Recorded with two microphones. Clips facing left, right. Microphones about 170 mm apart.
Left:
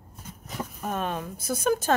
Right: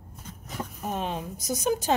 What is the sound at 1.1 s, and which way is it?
Speech, 15° right (ahead or behind).